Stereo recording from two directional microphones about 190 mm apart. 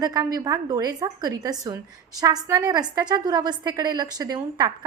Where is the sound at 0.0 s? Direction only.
20° right (ahead or behind).